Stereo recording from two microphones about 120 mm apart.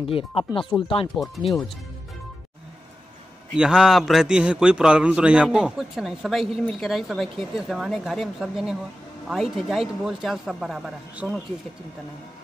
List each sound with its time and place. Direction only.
0.1 s speech: 50° left (ahead or behind)
1.1 s a man's voice: centre (ahead or behind)
3.5 s a man's voice: 5° right (ahead or behind)